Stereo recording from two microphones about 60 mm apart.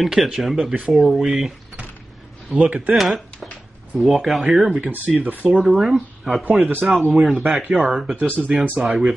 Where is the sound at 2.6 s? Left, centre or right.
Right.